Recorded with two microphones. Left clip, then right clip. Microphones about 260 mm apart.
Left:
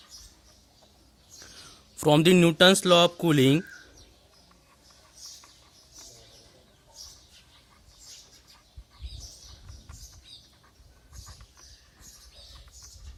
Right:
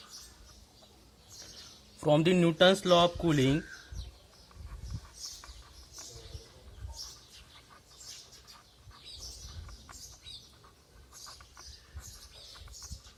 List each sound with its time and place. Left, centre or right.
2.0 s speech: left